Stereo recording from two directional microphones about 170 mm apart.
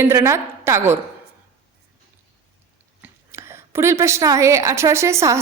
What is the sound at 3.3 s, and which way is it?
A woman's voice, 15° right (ahead or behind).